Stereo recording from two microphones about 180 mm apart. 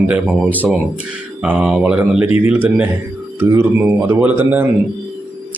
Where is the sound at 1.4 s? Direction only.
5° right (ahead or behind).